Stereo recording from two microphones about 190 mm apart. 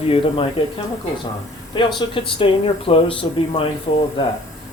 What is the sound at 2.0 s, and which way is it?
Speech, 25° left (ahead or behind).